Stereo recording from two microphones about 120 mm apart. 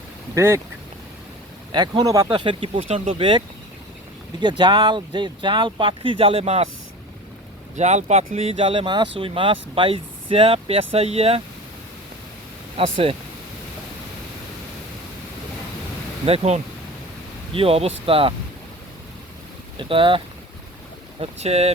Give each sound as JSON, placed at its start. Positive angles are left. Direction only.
{"t": 0.3, "sound": "speech", "side_deg": -25}
{"t": 1.7, "sound": "speech", "side_deg": -35}
{"t": 7.8, "sound": "speech", "side_deg": -75}
{"t": 12.7, "sound": "speech", "side_deg": -50}
{"t": 16.2, "sound": "speech", "side_deg": -55}
{"t": 19.9, "sound": "speech", "side_deg": -45}
{"t": 21.2, "sound": "speech", "side_deg": -60}